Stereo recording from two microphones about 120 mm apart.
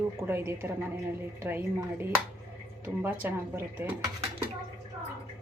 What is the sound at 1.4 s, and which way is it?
Speech, 20° right (ahead or behind).